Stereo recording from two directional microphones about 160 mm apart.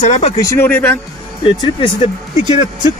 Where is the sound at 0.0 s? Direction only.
50° left (ahead or behind).